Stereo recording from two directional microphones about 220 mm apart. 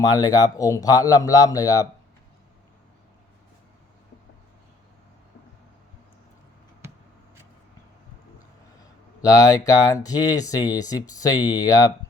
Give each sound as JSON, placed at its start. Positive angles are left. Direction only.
{"t": 0.0, "sound": "speech", "side_deg": 15}
{"t": 9.2, "sound": "speech", "side_deg": 15}